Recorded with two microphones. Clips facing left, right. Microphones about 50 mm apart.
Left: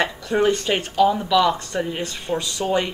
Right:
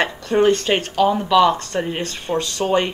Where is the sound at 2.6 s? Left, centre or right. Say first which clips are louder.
Right 3 dB; right.